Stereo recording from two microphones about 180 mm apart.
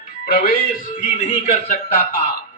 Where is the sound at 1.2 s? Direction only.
40° left (ahead or behind).